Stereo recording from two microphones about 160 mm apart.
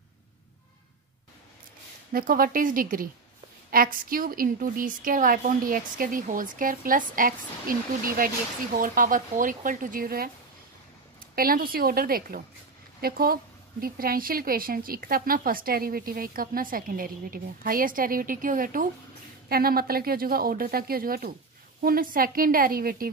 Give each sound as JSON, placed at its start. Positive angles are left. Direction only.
{"t": 2.1, "sound": "a woman's voice", "side_deg": -65}
{"t": 19.5, "sound": "a woman's voice", "side_deg": -70}